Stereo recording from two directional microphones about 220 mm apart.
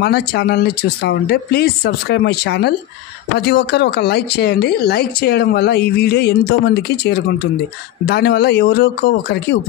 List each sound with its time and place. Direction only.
0.0 s speech: 50° left (ahead or behind)